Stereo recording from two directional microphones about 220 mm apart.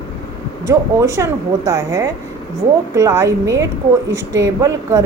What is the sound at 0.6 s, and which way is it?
A woman's voice, 15° right (ahead or behind).